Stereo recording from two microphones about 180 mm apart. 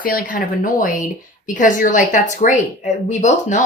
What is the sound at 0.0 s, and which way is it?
Speech, 50° left (ahead or behind).